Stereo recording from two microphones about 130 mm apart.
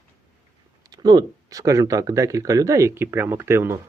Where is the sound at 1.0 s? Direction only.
30° right (ahead or behind).